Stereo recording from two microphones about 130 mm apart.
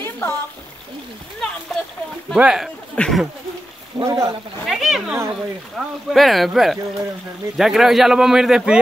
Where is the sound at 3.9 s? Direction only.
25° right (ahead or behind).